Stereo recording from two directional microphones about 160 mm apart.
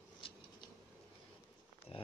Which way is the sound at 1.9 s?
40° left (ahead or behind).